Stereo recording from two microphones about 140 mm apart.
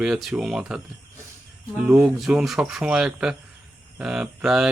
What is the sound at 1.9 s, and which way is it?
Speech, 10° right (ahead or behind).